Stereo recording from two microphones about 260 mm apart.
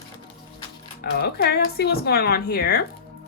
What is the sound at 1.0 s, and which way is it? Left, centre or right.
Speech, left.